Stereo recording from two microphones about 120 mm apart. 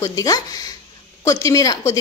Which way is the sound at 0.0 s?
30° left (ahead or behind).